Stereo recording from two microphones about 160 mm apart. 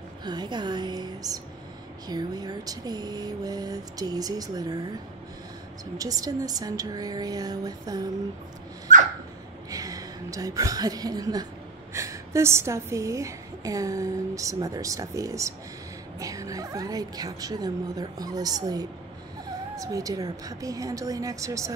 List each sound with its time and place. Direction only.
0.2 s a woman's voice: 25° right (ahead or behind)
5.9 s a woman's voice: 20° right (ahead or behind)
8.9 s dog: 50° right (ahead or behind)
9.7 s a woman's voice: 20° right (ahead or behind)